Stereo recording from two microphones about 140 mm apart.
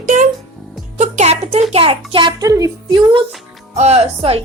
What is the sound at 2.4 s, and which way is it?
Speech, 25° right (ahead or behind).